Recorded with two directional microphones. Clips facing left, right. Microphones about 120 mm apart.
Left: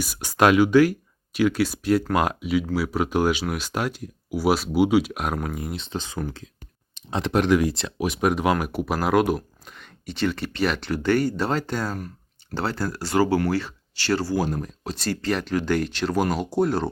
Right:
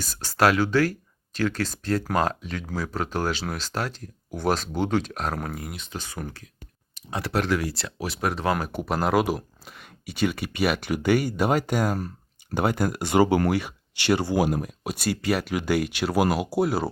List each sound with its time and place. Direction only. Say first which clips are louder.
0.0 s speech: left 2 dB; 15° left (ahead or behind)
5.5 s speech: left 5 dB; 25° left (ahead or behind)
8.6 s speech: left 1 dB; 5° left (ahead or behind)